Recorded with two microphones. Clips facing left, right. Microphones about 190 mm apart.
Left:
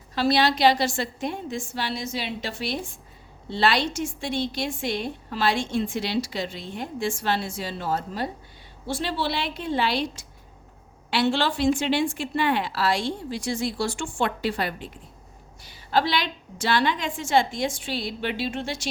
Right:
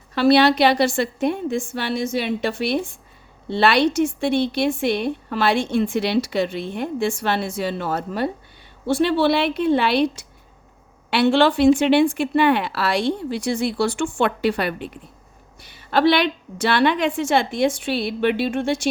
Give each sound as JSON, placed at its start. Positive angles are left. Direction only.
{"t": 0.1, "sound": "a woman's voice", "side_deg": -60}
{"t": 11.1, "sound": "a woman's voice", "side_deg": -60}